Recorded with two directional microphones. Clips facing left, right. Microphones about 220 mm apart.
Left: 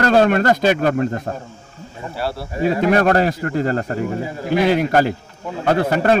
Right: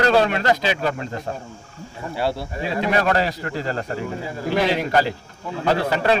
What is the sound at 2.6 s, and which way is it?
A man's voice, 45° left (ahead or behind).